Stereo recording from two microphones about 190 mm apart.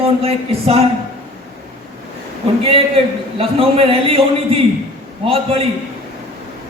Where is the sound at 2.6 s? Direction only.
30° right (ahead or behind).